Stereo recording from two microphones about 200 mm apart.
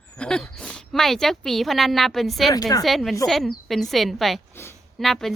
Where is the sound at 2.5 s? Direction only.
20° left (ahead or behind).